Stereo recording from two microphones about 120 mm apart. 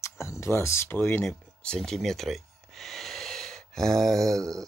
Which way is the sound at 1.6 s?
5° left (ahead or behind).